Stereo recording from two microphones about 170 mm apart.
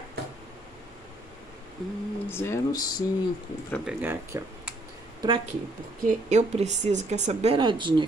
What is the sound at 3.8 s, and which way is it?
Speech, 10° right (ahead or behind).